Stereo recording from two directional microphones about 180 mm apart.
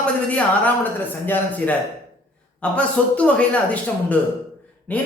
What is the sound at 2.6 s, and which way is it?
Speech, 5° left (ahead or behind).